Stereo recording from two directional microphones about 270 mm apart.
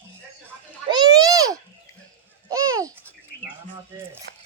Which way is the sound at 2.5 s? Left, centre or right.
Centre.